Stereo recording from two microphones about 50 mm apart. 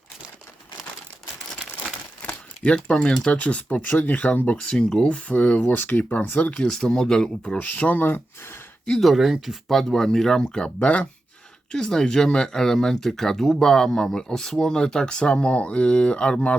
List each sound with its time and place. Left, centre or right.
2.7 s speech: centre
4.7 s speech: centre
5.0 s speech: left
5.6 s speech: left
6.6 s speech: centre
7.6 s speech: left
8.9 s speech: centre
10.8 s speech: left
11.7 s speech: centre